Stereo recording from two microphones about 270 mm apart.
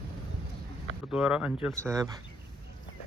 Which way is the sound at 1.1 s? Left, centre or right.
Centre.